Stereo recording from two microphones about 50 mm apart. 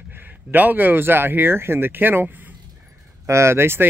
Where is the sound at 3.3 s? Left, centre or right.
Right.